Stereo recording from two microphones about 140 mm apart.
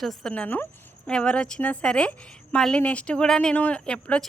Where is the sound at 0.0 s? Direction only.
5° left (ahead or behind).